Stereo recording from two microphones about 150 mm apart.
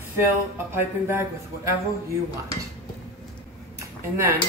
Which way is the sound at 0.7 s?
15° right (ahead or behind).